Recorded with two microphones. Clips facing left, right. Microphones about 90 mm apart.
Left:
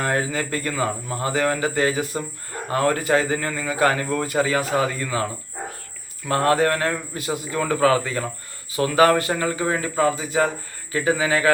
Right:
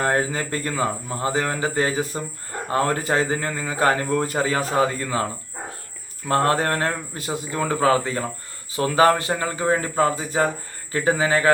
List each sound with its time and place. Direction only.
0.0 s a man's voice: 35° right (ahead or behind)
6.2 s a man's voice: 30° right (ahead or behind)